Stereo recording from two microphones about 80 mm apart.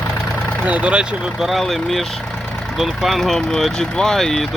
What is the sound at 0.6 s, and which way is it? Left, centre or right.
Speech, centre.